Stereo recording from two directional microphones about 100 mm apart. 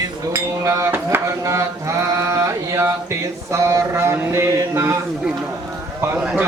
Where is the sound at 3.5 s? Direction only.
30° right (ahead or behind).